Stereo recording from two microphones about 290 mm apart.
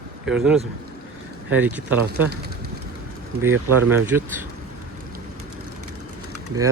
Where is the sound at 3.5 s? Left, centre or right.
Right.